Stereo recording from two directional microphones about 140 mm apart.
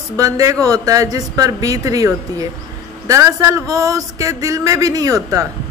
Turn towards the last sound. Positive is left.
turn(degrees=-25)  # may be behind; listen again after turning